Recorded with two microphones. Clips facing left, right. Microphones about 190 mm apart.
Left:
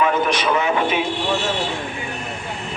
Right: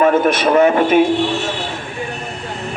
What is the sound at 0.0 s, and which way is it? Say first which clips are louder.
A man's voice: right 6 dB; 50° right (ahead or behind).